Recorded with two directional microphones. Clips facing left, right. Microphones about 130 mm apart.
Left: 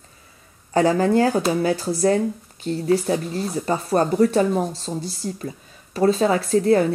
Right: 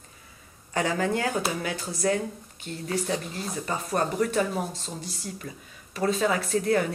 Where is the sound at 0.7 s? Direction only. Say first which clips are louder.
Left 9 dB; 35° left (ahead or behind).